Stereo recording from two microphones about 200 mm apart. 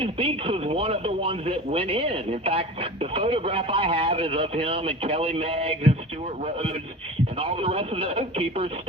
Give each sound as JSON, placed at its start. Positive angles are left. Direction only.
{"t": 0.0, "sound": "speech", "side_deg": -30}
{"t": 7.3, "sound": "speech", "side_deg": -25}